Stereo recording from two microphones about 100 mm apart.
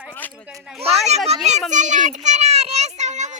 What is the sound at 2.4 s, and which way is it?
Speech, 90° right.